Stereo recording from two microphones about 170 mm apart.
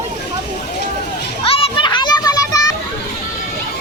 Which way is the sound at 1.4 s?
35° left (ahead or behind).